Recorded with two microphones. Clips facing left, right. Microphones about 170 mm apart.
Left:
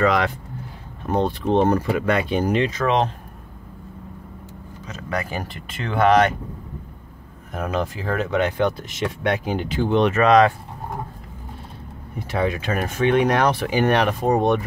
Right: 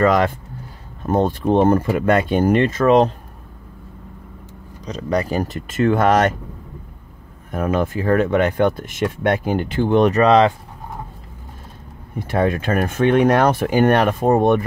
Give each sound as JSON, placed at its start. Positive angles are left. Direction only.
{"t": 0.0, "sound": "speech", "side_deg": -45}
{"t": 4.8, "sound": "speech", "side_deg": -35}
{"t": 7.7, "sound": "speech", "side_deg": -55}
{"t": 12.3, "sound": "speech", "side_deg": -50}